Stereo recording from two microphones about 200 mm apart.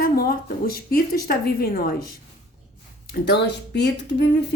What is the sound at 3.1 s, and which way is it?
Speech, 55° left (ahead or behind).